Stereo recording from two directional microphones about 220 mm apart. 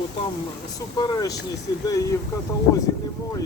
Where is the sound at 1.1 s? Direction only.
15° left (ahead or behind).